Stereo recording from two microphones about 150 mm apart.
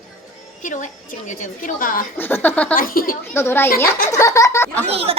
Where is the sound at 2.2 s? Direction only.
15° left (ahead or behind).